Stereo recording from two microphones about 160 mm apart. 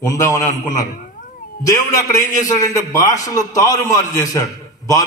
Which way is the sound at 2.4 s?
20° left (ahead or behind).